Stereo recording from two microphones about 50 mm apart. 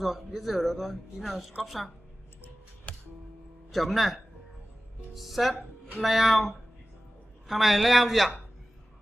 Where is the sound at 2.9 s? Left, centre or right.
Left.